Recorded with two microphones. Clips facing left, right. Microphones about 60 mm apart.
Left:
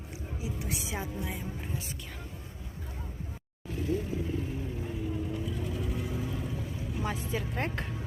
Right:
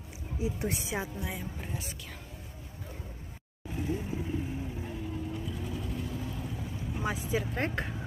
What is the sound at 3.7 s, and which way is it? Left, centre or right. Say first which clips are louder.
Vehicle: left 2 dB; centre.